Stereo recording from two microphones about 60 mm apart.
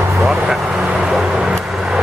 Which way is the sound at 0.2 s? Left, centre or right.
Centre.